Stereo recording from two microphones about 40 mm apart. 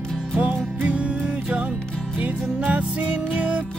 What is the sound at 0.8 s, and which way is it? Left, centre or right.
Music, right.